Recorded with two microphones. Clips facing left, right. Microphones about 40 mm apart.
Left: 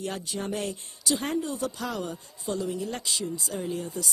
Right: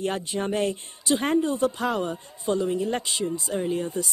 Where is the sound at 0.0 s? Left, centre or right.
Right.